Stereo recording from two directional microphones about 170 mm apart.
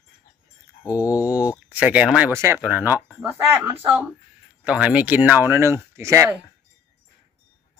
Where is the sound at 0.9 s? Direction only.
10° right (ahead or behind).